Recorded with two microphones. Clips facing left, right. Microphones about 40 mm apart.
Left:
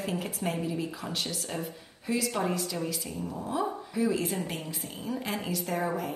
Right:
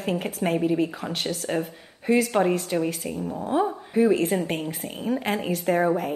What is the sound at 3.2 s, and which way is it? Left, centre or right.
Speech, right.